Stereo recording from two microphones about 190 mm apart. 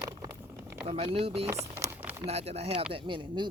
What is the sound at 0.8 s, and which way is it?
Speech, 30° right (ahead or behind).